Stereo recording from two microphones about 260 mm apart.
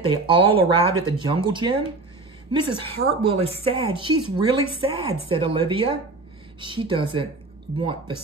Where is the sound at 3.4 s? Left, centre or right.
Right.